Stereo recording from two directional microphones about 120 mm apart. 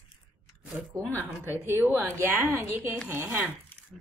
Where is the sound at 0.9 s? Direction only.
25° right (ahead or behind).